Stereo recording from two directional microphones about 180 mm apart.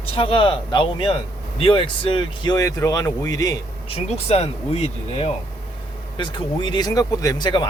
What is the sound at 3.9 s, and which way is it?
Speech, 35° left (ahead or behind).